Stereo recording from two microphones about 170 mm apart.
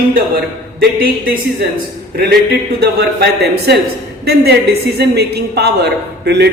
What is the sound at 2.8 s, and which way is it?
Speech, 70° right (ahead or behind).